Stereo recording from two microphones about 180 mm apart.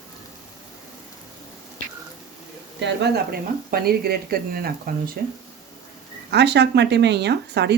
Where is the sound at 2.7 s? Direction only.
70° right (ahead or behind).